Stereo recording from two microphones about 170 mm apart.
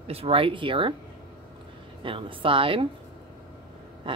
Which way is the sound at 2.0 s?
30° right (ahead or behind).